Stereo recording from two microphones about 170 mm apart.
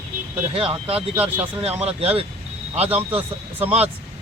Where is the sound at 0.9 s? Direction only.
10° right (ahead or behind).